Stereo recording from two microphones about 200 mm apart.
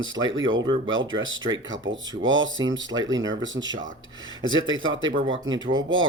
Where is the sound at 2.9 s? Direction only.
40° right (ahead or behind).